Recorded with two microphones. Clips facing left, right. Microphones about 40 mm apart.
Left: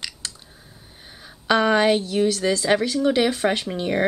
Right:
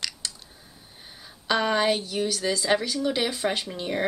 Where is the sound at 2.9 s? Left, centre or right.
Left.